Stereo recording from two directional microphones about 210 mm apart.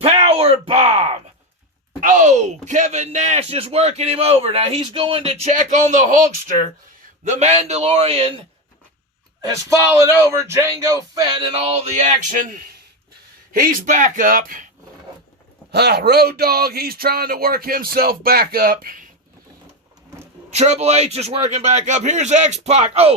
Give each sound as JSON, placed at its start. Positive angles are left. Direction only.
{"t": 0.0, "sound": "a sound", "side_deg": -30}
{"t": 2.0, "sound": "speech", "side_deg": -35}
{"t": 7.3, "sound": "speech", "side_deg": -30}
{"t": 9.4, "sound": "speech", "side_deg": -15}
{"t": 13.5, "sound": "speech", "side_deg": -40}
{"t": 15.7, "sound": "speech", "side_deg": -50}
{"t": 20.5, "sound": "speech", "side_deg": -30}